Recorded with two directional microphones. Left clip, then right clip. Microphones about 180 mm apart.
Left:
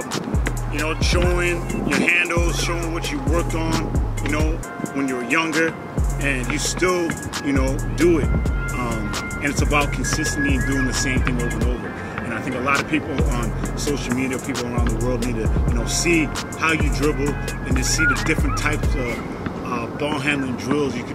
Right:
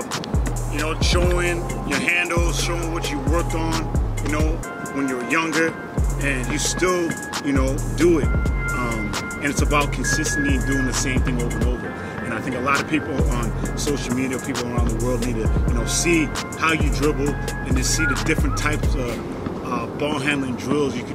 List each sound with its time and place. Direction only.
0.7 s speech: 5° right (ahead or behind)
4.9 s speech: centre (ahead or behind)
9.4 s speech: centre (ahead or behind)
12.4 s speech: centre (ahead or behind)